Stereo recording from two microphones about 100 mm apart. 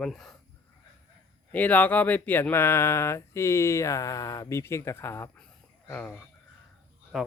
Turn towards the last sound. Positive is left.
turn(degrees=-5)  # may be behind; listen again after turning